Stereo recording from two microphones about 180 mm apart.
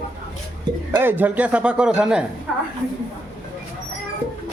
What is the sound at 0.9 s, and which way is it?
Speech, 10° right (ahead or behind).